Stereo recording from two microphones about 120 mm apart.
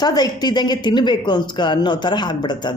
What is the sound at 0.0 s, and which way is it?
A woman's voice, 35° left (ahead or behind).